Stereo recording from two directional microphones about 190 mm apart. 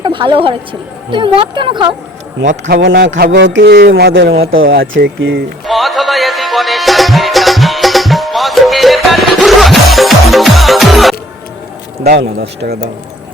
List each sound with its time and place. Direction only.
0.0 s a woman's voice: 25° right (ahead or behind)
2.5 s a man's voice: 60° right (ahead or behind)
5.6 s music: centre (ahead or behind)
12.0 s a man's voice: 55° right (ahead or behind)